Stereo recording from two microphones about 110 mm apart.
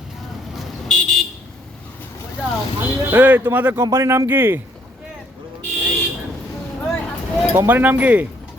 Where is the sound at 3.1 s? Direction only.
15° right (ahead or behind).